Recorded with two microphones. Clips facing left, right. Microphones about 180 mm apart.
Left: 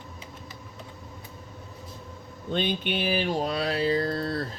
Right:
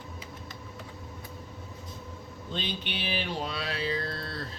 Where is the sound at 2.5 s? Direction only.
55° left (ahead or behind).